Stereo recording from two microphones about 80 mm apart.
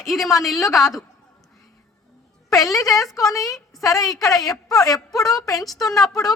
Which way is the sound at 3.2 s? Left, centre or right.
Left.